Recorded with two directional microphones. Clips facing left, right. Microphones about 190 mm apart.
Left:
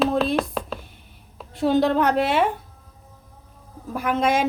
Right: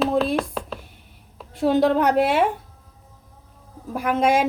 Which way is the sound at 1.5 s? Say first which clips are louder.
Right 1 dB; 10° right (ahead or behind).